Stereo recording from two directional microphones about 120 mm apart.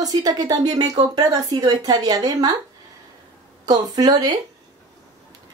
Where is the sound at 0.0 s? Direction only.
30° right (ahead or behind).